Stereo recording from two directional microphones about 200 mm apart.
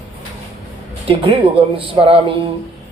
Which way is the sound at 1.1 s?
25° right (ahead or behind).